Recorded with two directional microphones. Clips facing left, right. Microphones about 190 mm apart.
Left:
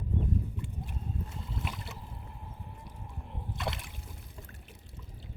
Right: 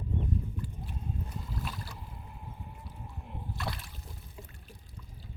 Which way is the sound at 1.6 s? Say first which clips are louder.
Left 1 dB; 25° left (ahead or behind).